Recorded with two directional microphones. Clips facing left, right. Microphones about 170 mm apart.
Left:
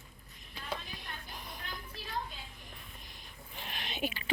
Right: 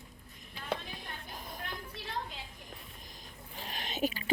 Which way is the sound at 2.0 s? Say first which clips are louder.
Right 3 dB; 70° right (ahead or behind).